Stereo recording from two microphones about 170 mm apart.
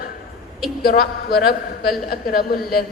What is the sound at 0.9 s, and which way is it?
A woman's voice, 65° left (ahead or behind).